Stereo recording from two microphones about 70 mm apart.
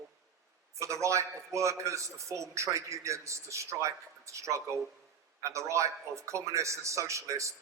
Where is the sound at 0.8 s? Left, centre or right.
Right.